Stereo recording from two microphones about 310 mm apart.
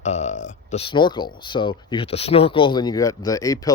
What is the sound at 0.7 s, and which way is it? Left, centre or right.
Speech, centre.